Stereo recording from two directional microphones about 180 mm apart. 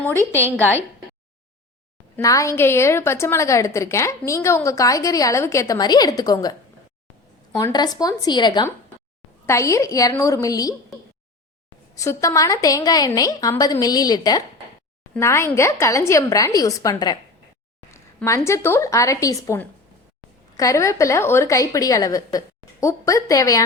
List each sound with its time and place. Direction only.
0.2 s a woman's voice: 15° right (ahead or behind)
0.6 s a woman's voice: 10° left (ahead or behind)
2.1 s a woman's voice: 15° left (ahead or behind)
7.6 s a woman's voice: 20° left (ahead or behind)
11.9 s a woman's voice: 15° left (ahead or behind)